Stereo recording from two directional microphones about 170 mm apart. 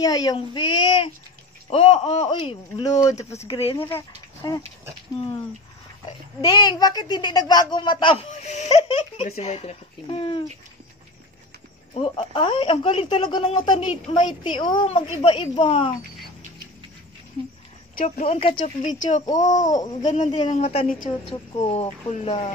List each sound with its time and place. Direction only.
0.0 s a woman's voice: 20° left (ahead or behind)
3.7 s a woman's voice: 15° left (ahead or behind)
6.0 s a woman's voice: 25° left (ahead or behind)
8.3 s speech: 45° left (ahead or behind)
11.9 s a woman's voice: 30° left (ahead or behind)
17.9 s speech: 55° left (ahead or behind)
18.2 s speech: 35° left (ahead or behind)
18.9 s speech: 45° left (ahead or behind)
20.2 s a woman's voice: 30° left (ahead or behind)